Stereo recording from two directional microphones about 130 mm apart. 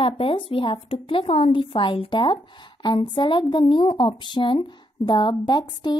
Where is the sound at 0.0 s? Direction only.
45° left (ahead or behind).